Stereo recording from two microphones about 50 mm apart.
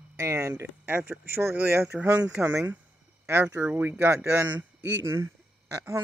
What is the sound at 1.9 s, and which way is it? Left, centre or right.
Speech, right.